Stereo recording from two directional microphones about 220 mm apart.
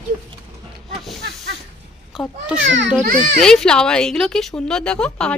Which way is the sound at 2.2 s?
Centre (ahead or behind).